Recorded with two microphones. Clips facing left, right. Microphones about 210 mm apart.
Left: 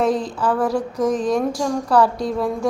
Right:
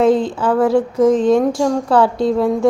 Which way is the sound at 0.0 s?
25° right (ahead or behind).